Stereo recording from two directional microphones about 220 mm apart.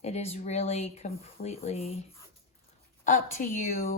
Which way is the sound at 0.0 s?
30° left (ahead or behind).